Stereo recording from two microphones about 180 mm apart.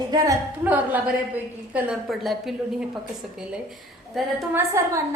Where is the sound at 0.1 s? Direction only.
20° right (ahead or behind).